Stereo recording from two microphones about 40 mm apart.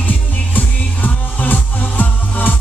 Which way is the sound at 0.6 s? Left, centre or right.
Left.